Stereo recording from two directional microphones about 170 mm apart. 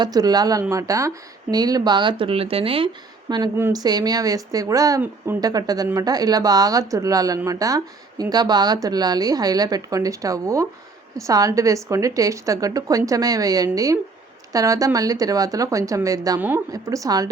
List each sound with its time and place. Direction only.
0.0 s a woman's voice: 20° right (ahead or behind)